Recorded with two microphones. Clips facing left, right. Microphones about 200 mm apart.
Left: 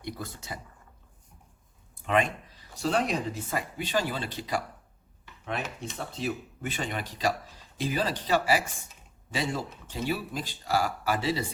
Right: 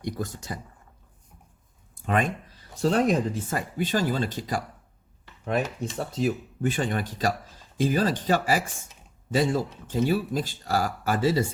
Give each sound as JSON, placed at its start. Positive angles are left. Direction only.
{"t": 0.0, "sound": "speech", "side_deg": -50}
{"t": 2.0, "sound": "speech", "side_deg": -45}
{"t": 6.1, "sound": "speech", "side_deg": -45}